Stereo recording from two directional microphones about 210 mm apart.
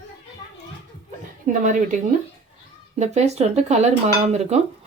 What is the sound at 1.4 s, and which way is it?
Speech, 35° right (ahead or behind).